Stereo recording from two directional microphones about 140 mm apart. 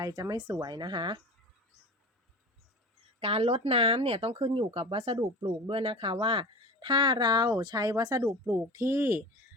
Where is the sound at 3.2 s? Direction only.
45° right (ahead or behind).